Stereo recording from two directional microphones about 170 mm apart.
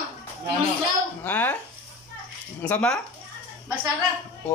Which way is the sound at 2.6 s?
10° left (ahead or behind).